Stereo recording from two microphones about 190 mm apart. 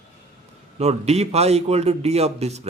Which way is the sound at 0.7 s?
35° right (ahead or behind).